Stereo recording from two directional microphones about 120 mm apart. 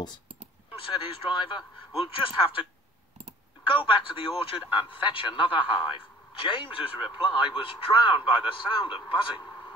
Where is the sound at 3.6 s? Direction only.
45° left (ahead or behind).